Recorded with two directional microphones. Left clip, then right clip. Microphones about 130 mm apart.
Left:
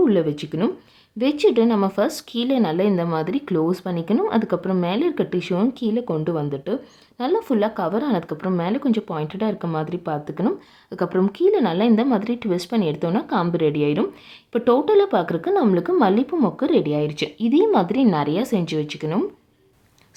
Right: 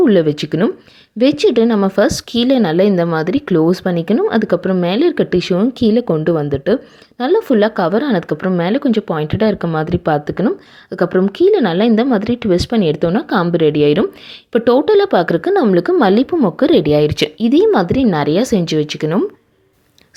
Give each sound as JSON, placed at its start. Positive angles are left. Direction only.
{"t": 0.0, "sound": "speech", "side_deg": -35}